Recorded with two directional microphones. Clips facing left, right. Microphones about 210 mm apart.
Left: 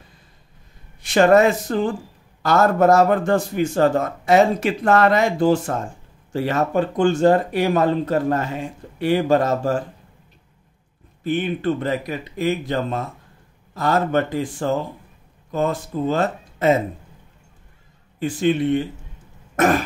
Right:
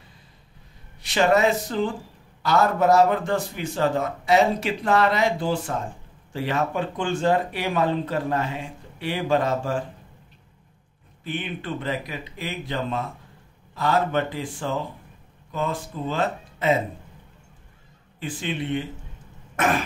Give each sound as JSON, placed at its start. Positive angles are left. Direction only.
{"t": 1.0, "sound": "a man's voice", "side_deg": 50}
{"t": 11.2, "sound": "a man's voice", "side_deg": 45}
{"t": 18.2, "sound": "a man's voice", "side_deg": 45}